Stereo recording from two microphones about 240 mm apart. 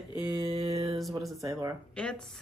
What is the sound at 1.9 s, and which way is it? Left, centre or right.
Speech, centre.